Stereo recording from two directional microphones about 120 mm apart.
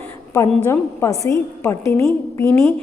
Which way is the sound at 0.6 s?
20° left (ahead or behind).